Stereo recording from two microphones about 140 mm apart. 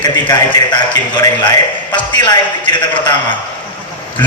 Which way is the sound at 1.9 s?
30° left (ahead or behind).